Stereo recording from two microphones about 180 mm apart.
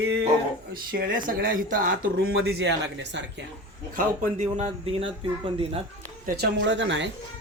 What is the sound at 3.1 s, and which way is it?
Speech, 90° right.